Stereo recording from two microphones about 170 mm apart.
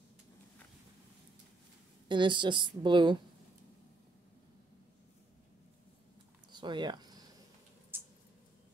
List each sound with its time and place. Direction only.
2.0 s a woman's voice: 25° right (ahead or behind)
6.5 s a sound: 25° right (ahead or behind)
7.9 s mouse: 10° right (ahead or behind)